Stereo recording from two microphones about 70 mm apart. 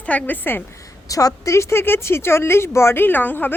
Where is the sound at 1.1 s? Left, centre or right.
Left.